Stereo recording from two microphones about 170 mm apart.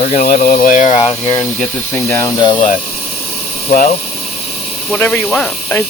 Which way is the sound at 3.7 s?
60° left (ahead or behind).